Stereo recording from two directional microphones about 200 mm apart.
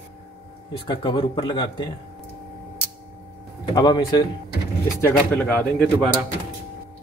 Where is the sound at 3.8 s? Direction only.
20° left (ahead or behind).